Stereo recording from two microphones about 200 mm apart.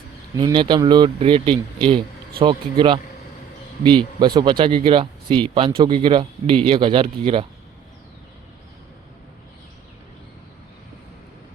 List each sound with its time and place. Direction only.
0.3 s speech: 20° right (ahead or behind)